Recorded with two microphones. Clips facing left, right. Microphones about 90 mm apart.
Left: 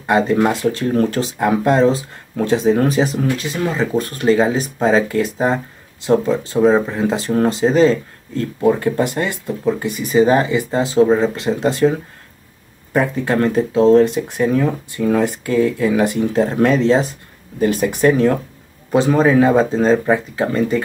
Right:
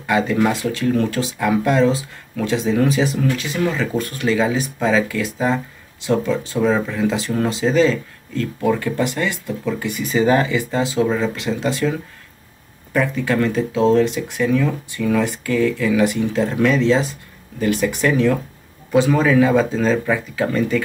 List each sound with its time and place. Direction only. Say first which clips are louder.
0.0 s speech: left 3 dB; 35° left (ahead or behind)
12.9 s speech: left 2 dB; 35° left (ahead or behind)